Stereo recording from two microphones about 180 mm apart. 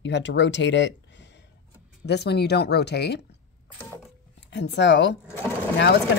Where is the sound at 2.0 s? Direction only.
70° left (ahead or behind).